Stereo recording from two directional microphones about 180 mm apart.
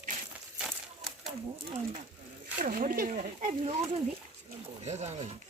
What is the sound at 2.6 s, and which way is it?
Speech, 50° right (ahead or behind).